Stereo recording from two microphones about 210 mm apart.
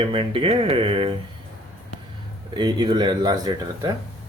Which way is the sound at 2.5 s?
20° right (ahead or behind).